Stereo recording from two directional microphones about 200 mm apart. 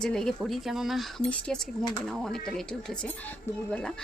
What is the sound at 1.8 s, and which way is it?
Speech, 20° left (ahead or behind).